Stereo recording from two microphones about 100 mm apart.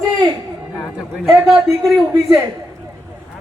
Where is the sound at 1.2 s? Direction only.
5° right (ahead or behind).